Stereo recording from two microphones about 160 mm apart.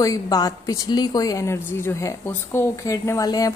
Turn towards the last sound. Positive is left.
turn(degrees=20)  # may be behind; listen again after turning